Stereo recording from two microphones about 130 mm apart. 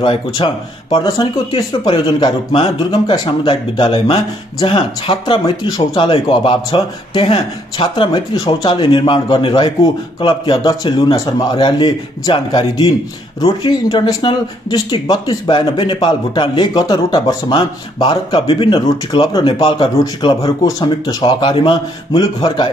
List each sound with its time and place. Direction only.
0.0 s speech: 35° left (ahead or behind)